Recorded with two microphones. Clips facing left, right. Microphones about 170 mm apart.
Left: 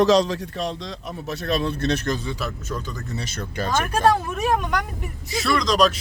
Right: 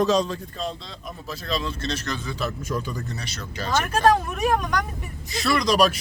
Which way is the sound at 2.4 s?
5° right (ahead or behind).